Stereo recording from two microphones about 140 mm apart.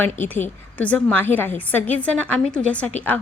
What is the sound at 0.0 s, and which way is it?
A woman's voice, 15° left (ahead or behind).